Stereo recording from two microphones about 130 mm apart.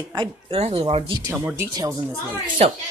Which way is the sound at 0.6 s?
50° right (ahead or behind).